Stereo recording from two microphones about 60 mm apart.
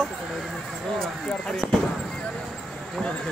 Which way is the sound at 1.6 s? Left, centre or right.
Right.